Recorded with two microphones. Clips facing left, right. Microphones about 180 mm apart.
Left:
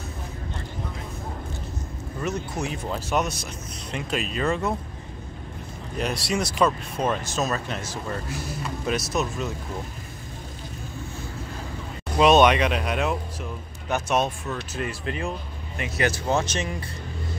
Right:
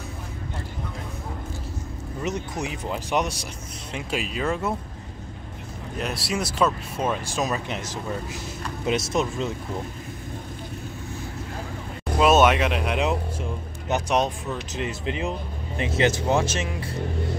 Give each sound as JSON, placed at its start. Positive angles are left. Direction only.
{"t": 2.2, "sound": "speech", "side_deg": -15}
{"t": 5.9, "sound": "speech", "side_deg": 0}
{"t": 12.2, "sound": "speech", "side_deg": -5}
{"t": 13.0, "sound": "speech", "side_deg": -20}
{"t": 16.4, "sound": "speech", "side_deg": -5}